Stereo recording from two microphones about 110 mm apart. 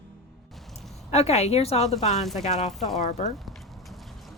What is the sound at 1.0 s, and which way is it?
Speech, 75° left (ahead or behind).